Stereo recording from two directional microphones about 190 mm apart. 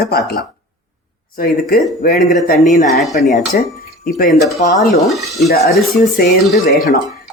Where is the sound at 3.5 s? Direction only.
50° left (ahead or behind).